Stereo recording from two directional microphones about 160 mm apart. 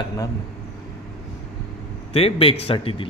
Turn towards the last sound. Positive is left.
turn(degrees=35)  # may be behind; listen again after turning